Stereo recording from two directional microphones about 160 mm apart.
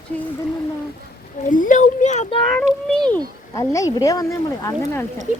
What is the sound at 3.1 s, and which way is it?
Speech, 20° left (ahead or behind).